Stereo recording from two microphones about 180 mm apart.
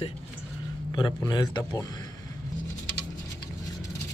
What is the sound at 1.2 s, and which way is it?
Speech, 20° left (ahead or behind).